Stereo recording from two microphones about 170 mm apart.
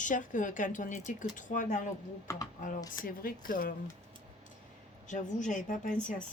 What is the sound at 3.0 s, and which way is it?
Speech, 55° left (ahead or behind).